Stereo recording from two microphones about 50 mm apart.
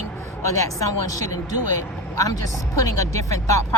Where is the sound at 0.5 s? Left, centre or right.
Left.